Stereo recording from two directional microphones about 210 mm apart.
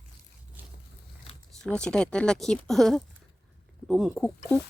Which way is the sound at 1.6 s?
5° left (ahead or behind).